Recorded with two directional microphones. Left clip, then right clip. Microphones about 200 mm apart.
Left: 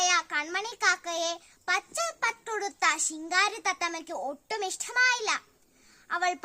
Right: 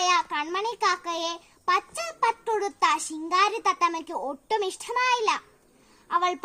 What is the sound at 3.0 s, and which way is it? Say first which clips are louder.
A child's voice: right 3 dB; 20° left (ahead or behind).